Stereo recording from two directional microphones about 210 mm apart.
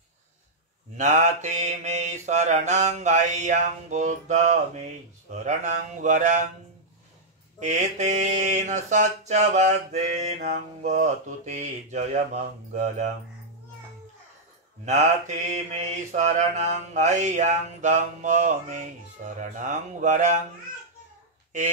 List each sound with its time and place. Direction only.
0.9 s mantra: 35° right (ahead or behind)
7.6 s mantra: 35° right (ahead or behind)
14.9 s mantra: 35° right (ahead or behind)